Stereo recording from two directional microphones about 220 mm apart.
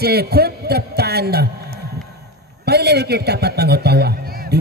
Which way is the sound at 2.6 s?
50° right (ahead or behind).